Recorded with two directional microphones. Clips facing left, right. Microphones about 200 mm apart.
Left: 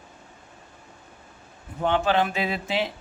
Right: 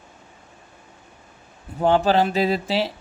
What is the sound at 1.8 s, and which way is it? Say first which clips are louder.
Speech: right 5 dB; 35° right (ahead or behind).